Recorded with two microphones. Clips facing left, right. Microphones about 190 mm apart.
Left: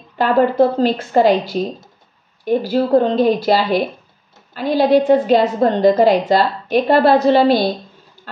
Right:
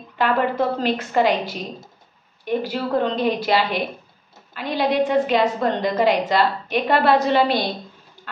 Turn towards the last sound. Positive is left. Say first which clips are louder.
# left 6 dB
turn(degrees=35)  # may be behind; listen again after turning